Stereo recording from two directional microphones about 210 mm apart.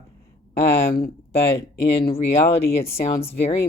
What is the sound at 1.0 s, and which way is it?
Speech, 30° left (ahead or behind).